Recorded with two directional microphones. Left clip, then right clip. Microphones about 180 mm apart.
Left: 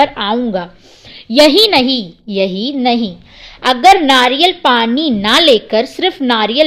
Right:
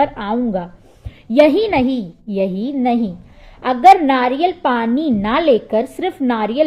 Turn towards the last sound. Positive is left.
turn(degrees=20)  # may be behind; listen again after turning